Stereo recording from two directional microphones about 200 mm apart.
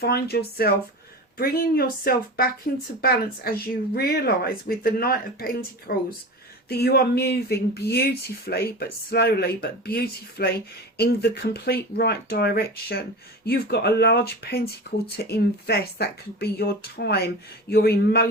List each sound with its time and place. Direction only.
0.0 s speech: 50° left (ahead or behind)